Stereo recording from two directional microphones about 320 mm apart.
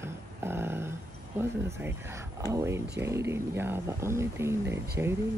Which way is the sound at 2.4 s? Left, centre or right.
Centre.